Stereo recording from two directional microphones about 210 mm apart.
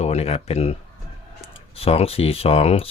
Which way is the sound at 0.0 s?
30° left (ahead or behind).